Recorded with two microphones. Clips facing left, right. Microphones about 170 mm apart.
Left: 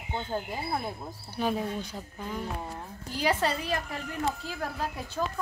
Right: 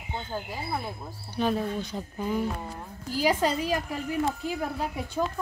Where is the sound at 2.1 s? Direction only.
10° right (ahead or behind).